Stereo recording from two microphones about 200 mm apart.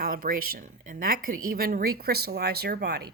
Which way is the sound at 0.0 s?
45° right (ahead or behind).